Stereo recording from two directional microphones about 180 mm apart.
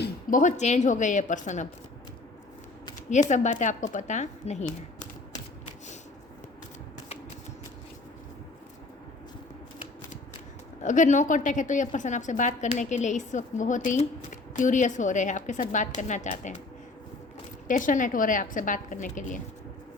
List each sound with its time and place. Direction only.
0.0 s a woman's voice: 50° left (ahead or behind)
3.1 s speech: 40° left (ahead or behind)
10.8 s a woman's voice: 45° left (ahead or behind)
17.7 s a woman's voice: 45° left (ahead or behind)